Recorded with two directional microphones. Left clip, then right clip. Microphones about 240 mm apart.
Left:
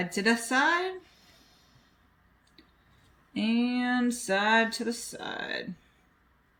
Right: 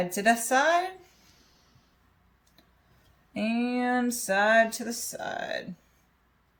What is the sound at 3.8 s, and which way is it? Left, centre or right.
Music, right.